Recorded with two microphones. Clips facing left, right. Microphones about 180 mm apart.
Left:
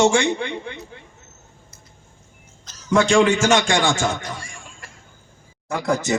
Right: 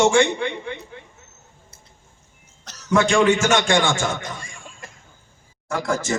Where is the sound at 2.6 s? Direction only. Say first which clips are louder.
Left 1 dB; 70° right (ahead or behind).